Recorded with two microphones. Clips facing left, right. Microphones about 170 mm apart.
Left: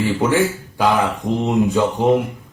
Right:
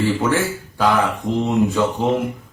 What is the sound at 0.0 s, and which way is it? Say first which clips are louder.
A man's voice: left 2 dB; 15° left (ahead or behind).